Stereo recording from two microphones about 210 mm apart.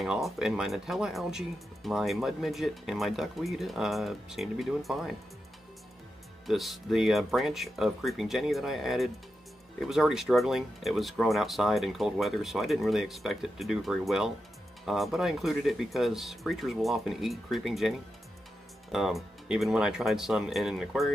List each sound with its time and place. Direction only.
0.0 s speech: centre (ahead or behind)
6.4 s speech: centre (ahead or behind)